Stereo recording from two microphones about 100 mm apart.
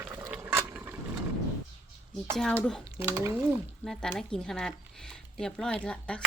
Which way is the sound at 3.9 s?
5° left (ahead or behind).